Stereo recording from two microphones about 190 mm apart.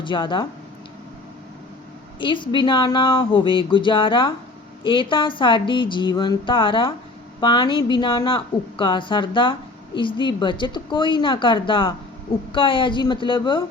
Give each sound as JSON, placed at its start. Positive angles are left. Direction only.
{"t": 0.0, "sound": "a woman's voice", "side_deg": 25}
{"t": 2.1, "sound": "a woman's voice", "side_deg": 25}